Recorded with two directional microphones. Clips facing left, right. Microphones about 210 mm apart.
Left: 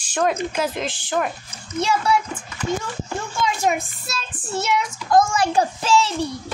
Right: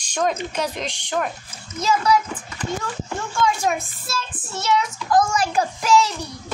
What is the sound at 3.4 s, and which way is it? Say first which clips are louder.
Speech: even; 15° left (ahead or behind).